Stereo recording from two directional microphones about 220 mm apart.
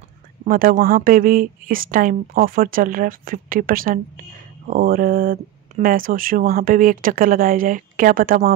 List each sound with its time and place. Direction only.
0.5 s speech: 40° right (ahead or behind)